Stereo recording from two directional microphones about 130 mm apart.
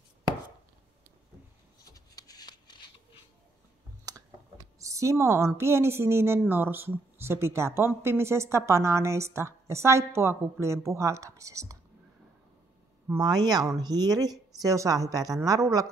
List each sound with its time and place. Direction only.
1.9 s shuffling cards: 30° left (ahead or behind)
4.0 s a sound: 30° right (ahead or behind)
5.6 s speech: 20° right (ahead or behind)
13.2 s speech: 30° right (ahead or behind)